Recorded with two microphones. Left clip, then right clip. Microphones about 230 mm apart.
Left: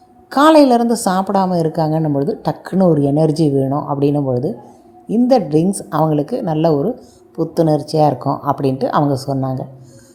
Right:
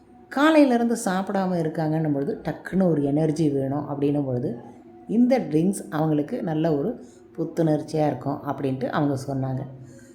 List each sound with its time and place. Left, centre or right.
0.3 s a woman's voice: left
3.7 s speech: centre
4.3 s a woman's voice: centre